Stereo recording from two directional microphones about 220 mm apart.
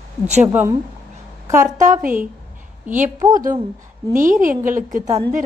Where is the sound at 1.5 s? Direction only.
15° right (ahead or behind).